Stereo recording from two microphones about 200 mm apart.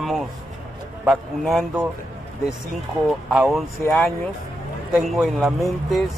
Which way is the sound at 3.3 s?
Centre (ahead or behind).